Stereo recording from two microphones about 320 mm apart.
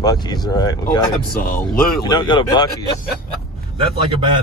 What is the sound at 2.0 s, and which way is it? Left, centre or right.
Speech, centre.